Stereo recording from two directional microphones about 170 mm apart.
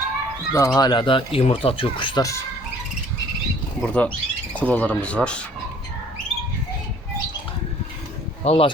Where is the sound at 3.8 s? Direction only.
5° left (ahead or behind).